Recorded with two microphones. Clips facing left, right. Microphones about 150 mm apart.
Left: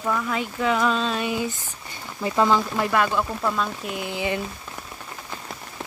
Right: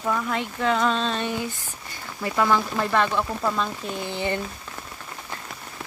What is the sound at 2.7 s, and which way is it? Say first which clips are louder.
Speech: left 1 dB; 10° left (ahead or behind).